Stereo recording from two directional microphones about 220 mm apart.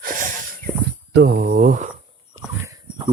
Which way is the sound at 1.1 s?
45° right (ahead or behind).